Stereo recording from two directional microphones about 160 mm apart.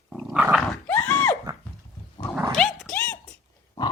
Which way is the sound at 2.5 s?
Centre (ahead or behind).